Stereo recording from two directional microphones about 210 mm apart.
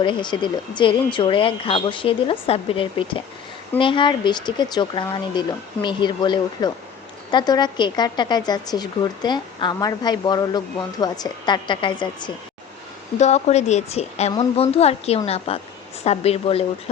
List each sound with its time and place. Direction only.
0.0 s speech: 20° left (ahead or behind)
13.1 s a woman's voice: 35° left (ahead or behind)